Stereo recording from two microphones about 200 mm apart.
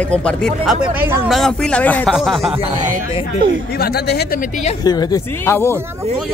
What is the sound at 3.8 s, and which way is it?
Speech, 50° left (ahead or behind).